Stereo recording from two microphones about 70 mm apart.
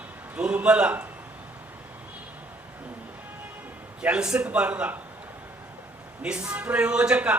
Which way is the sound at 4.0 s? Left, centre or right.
Centre.